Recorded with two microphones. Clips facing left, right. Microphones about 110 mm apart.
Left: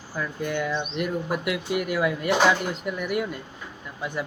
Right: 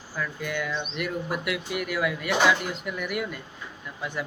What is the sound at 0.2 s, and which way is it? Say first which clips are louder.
Speech: left 3 dB; 35° left (ahead or behind).